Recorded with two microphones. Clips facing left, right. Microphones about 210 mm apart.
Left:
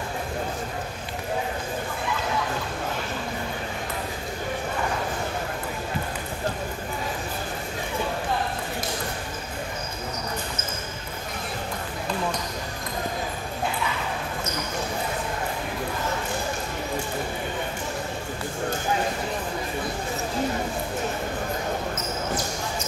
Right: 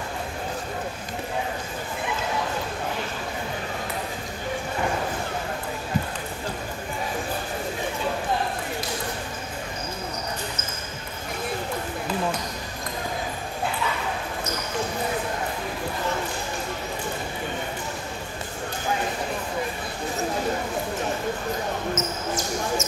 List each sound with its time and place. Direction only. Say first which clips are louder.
21.9 s basketball bounce: right 1 dB; 45° right (ahead or behind)